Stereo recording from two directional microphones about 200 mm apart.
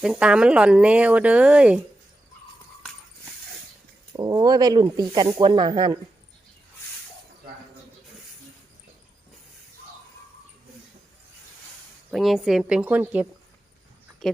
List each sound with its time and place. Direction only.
0.0 s speech: 5° right (ahead or behind)
4.2 s speech: 20° right (ahead or behind)
12.1 s speech: centre (ahead or behind)
14.2 s a sound: centre (ahead or behind)